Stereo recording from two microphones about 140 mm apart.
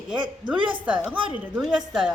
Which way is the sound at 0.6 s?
35° right (ahead or behind).